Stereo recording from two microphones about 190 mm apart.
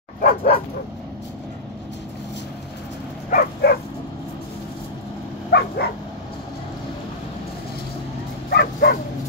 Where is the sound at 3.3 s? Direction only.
50° left (ahead or behind).